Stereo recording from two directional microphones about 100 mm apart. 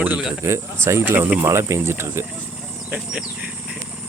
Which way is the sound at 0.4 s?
25° right (ahead or behind).